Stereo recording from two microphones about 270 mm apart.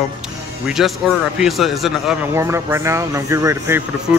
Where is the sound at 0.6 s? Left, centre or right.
Centre.